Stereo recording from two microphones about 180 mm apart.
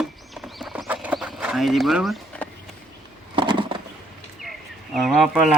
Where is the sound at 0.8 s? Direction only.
10° right (ahead or behind).